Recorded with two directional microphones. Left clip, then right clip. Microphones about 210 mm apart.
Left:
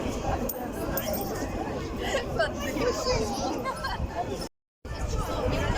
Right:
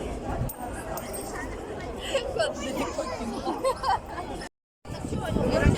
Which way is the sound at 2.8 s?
45° left (ahead or behind).